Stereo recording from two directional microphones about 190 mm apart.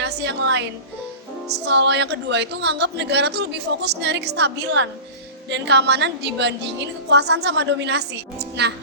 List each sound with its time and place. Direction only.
0.0 s music: 65° right (ahead or behind)
1.5 s a woman's voice: 65° right (ahead or behind)